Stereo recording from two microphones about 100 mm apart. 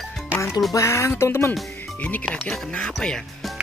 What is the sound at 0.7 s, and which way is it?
Speech, 30° left (ahead or behind).